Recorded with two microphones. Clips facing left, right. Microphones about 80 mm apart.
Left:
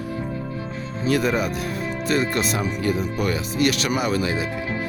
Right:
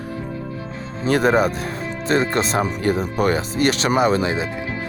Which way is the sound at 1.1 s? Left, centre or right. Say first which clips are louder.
Right 5 dB; right.